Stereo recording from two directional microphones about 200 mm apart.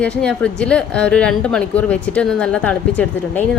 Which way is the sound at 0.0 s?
5° left (ahead or behind).